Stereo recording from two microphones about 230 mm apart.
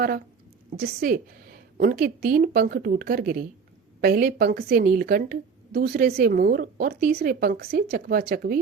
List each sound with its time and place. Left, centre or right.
0.8 s a woman's voice: right